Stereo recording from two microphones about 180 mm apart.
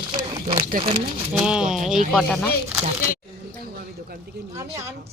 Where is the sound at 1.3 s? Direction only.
5° right (ahead or behind).